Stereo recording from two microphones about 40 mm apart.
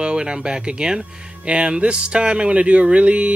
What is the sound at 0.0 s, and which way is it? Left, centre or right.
Speech, right.